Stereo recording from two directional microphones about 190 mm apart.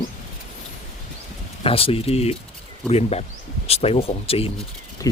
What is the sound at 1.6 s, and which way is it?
Speech, 30° left (ahead or behind).